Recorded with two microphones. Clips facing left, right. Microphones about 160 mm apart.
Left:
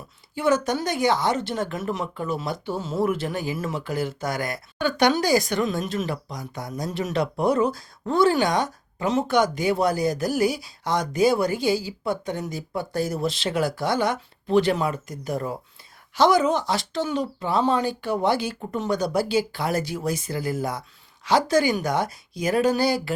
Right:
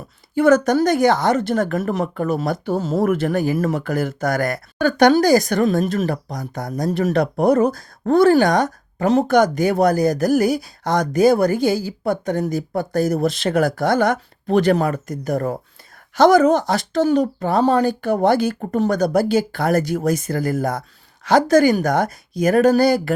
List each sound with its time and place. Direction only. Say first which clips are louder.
0.3 s speech: right 8 dB; 45° right (ahead or behind)